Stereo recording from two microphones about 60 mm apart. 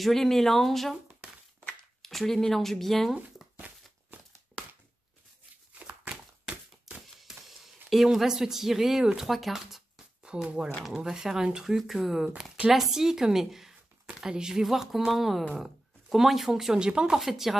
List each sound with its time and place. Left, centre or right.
0.0 s speech: centre
2.0 s speech: centre
3.5 s a sound: right
5.8 s a sound: right
7.0 s speech: centre
10.2 s speech: centre
17.2 s speech: centre